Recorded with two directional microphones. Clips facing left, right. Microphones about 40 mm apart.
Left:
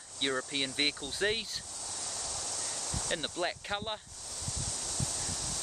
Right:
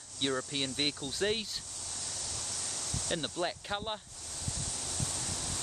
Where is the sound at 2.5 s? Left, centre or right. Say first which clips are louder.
Left 1 dB; centre.